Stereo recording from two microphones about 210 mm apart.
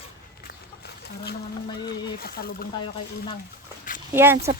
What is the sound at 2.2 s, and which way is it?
Speech, 45° left (ahead or behind).